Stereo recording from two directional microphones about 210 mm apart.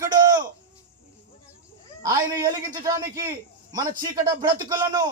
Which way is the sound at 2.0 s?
15° right (ahead or behind).